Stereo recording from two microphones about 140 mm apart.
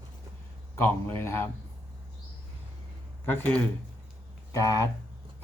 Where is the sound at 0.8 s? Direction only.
15° left (ahead or behind).